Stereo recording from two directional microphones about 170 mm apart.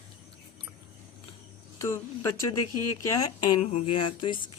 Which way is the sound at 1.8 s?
15° left (ahead or behind).